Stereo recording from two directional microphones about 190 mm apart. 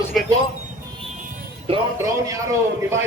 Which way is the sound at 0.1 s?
Centre (ahead or behind).